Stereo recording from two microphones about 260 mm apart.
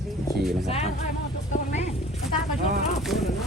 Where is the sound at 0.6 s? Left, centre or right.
Left.